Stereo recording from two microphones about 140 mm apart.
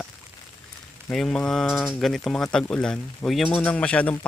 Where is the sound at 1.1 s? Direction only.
5° left (ahead or behind).